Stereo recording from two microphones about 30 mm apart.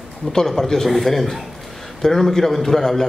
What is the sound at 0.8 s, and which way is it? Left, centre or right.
A man's voice, centre.